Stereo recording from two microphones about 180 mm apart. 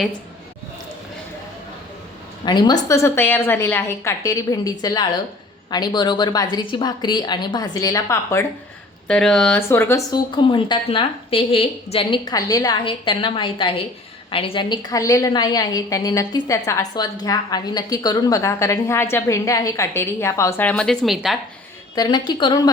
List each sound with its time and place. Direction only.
2.4 s a woman's voice: 25° left (ahead or behind)
2.9 s a woman's voice: 15° left (ahead or behind)
9.0 s speech: 5° left (ahead or behind)
10.1 s a woman's voice: 25° left (ahead or behind); by 21.3 s centre (ahead or behind)
21.9 s a woman's voice: 25° left (ahead or behind)